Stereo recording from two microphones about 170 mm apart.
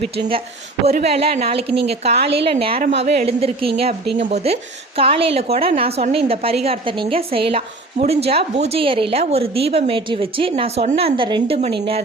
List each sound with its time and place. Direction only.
0.2 s a woman's voice: 30° right (ahead or behind)